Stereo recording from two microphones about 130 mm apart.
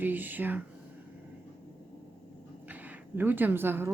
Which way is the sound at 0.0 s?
15° right (ahead or behind).